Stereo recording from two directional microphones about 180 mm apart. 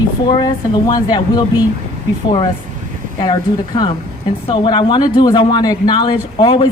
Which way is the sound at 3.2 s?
25° left (ahead or behind).